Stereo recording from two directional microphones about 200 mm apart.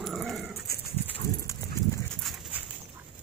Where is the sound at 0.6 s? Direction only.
50° left (ahead or behind).